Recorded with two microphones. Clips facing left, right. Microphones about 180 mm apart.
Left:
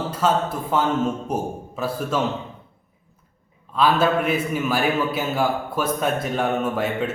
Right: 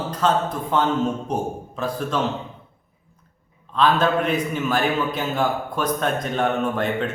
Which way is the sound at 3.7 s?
5° left (ahead or behind).